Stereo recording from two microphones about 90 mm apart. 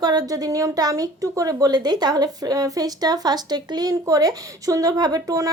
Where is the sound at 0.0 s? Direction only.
45° right (ahead or behind).